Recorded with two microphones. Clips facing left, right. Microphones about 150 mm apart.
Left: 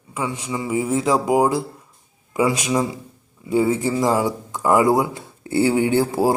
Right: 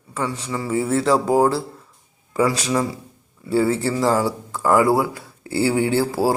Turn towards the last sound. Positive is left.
turn(degrees=20)  # may be behind; listen again after turning